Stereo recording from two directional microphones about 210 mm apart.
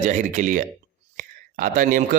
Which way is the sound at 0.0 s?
35° right (ahead or behind).